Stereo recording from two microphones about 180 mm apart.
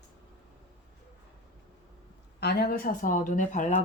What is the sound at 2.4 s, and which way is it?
Speech, 60° left (ahead or behind).